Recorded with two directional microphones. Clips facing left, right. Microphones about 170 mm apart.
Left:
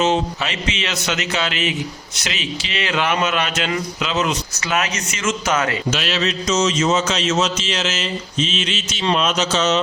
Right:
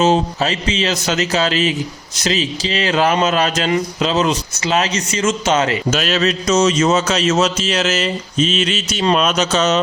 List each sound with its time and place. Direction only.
0.0 s speech: 35° right (ahead or behind)
5.9 s mantra: 45° right (ahead or behind)
9.0 s speech: 50° right (ahead or behind)